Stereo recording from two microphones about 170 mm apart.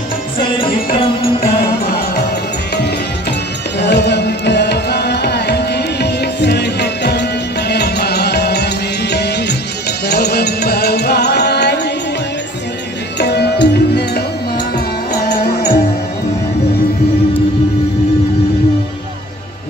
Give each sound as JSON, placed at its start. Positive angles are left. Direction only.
{"t": 2.7, "sound": "music", "side_deg": 80}
{"t": 13.2, "sound": "music", "side_deg": 75}
{"t": 15.2, "sound": "music", "side_deg": 65}